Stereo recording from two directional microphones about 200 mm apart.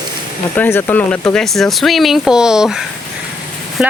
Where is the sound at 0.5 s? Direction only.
10° left (ahead or behind).